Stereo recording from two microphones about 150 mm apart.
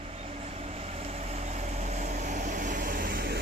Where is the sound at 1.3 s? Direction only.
50° right (ahead or behind).